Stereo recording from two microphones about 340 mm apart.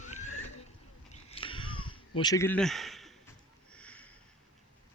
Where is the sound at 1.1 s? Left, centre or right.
Centre.